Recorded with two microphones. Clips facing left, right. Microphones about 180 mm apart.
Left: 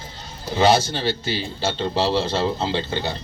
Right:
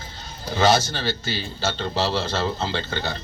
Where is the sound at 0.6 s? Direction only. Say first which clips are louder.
Left 2 dB; 25° left (ahead or behind).